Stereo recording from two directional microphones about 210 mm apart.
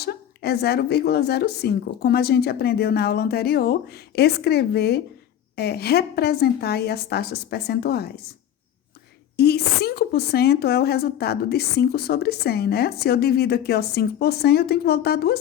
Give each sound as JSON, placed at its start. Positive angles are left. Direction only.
{"t": 0.0, "sound": "speech", "side_deg": 50}
{"t": 9.3, "sound": "speech", "side_deg": 50}